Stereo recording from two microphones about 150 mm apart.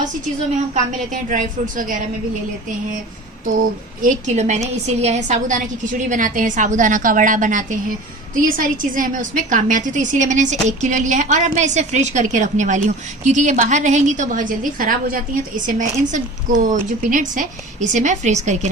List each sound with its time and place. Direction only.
0.7 s a woman's voice: 55° right (ahead or behind)
4.0 s a woman's voice: 55° right (ahead or behind)